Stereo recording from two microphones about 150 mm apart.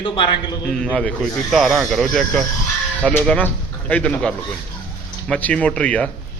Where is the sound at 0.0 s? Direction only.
35° left (ahead or behind).